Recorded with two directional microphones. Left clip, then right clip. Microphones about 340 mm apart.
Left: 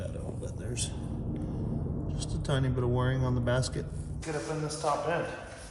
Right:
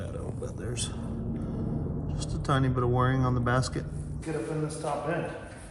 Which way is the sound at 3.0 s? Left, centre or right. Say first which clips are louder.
Right 3 dB; centre.